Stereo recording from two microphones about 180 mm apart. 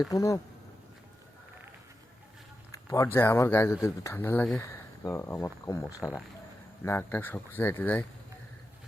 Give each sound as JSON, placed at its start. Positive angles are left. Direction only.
{"t": 0.1, "sound": "speech", "side_deg": 20}
{"t": 2.7, "sound": "speech", "side_deg": 15}